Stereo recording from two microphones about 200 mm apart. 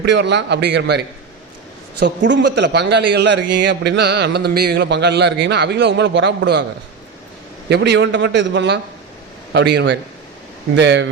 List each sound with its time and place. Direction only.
0.0 s a man's voice: 60° right (ahead or behind)
7.7 s a man's voice: 60° right (ahead or behind)